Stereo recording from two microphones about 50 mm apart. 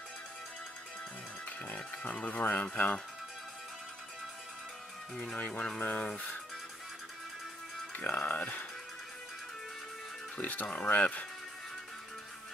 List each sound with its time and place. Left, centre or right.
1.7 s speech: left
5.1 s speech: centre
7.9 s speech: left
10.3 s speech: left